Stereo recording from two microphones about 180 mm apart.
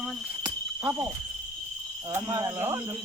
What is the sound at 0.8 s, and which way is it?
Owl, 10° right (ahead or behind).